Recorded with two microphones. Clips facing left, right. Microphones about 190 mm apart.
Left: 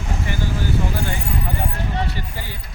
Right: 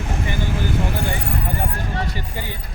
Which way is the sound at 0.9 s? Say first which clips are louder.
Right 1 dB; 60° right (ahead or behind).